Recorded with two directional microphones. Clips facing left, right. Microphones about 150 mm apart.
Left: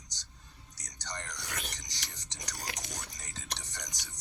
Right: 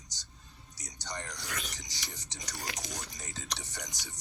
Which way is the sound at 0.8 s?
5° right (ahead or behind).